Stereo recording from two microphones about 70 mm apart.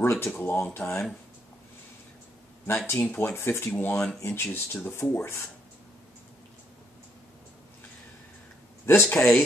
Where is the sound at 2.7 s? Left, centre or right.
Left.